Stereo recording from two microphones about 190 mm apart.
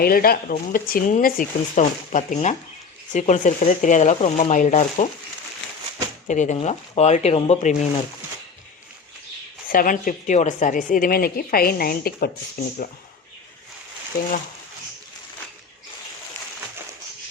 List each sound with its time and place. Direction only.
0.0 s a woman's voice: 50° left (ahead or behind)
6.2 s speech: 40° left (ahead or behind)
9.6 s a woman's voice: 45° left (ahead or behind)